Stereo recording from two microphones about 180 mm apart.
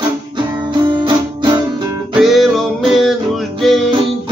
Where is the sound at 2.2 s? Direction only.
Centre (ahead or behind).